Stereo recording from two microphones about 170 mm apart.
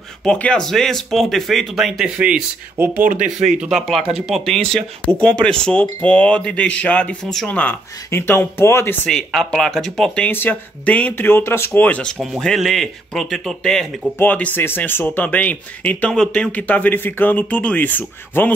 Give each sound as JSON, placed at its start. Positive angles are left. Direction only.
{"t": 0.2, "sound": "speech", "side_deg": 5}
{"t": 3.0, "sound": "speech", "side_deg": -50}
{"t": 3.4, "sound": "speech", "side_deg": -5}